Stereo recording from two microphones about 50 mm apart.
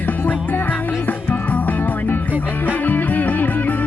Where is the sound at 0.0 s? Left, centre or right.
Left.